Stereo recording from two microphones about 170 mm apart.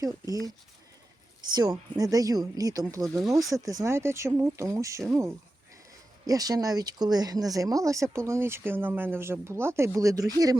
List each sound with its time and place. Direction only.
0.0 s speech: 20° right (ahead or behind)
1.5 s speech: 20° right (ahead or behind)